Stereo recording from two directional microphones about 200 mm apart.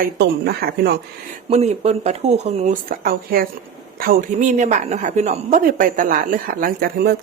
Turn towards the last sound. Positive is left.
turn(degrees=-50)  # may be behind; listen again after turning